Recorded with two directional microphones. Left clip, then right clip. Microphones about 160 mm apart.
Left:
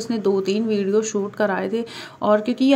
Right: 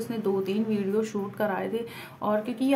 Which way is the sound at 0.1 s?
30° left (ahead or behind).